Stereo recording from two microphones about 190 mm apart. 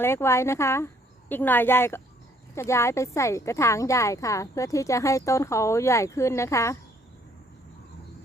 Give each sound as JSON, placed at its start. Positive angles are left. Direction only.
{"t": 0.0, "sound": "a woman's voice", "side_deg": 15}